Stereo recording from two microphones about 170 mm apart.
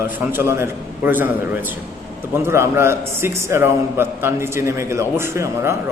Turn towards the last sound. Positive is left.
turn(degrees=-15)  # may be behind; listen again after turning